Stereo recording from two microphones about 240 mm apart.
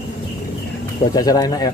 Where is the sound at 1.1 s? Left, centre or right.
Centre.